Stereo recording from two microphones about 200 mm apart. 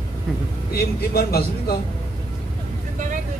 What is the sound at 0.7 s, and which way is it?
A man's voice, 50° left (ahead or behind).